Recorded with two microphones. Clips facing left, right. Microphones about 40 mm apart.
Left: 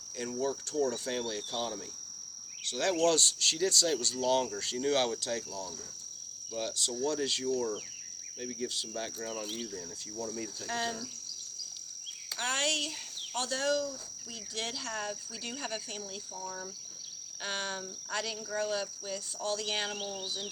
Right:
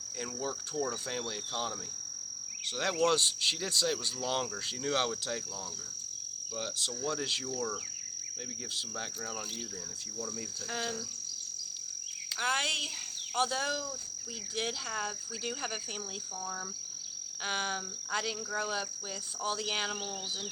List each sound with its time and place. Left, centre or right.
0.3 s cricket: centre
2.7 s cricket: centre
4.8 s speech: centre
6.6 s speech: centre
7.2 s cricket: centre
10.7 s speech: centre
12.4 s cricket: centre
17.4 s cricket: centre